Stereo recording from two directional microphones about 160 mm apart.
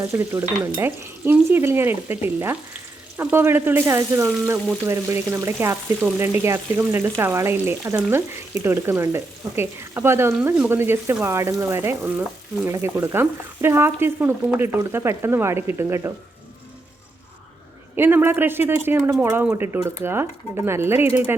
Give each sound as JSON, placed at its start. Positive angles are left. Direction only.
{"t": 0.0, "sound": "frying", "side_deg": -15}
{"t": 17.9, "sound": "frying", "side_deg": -15}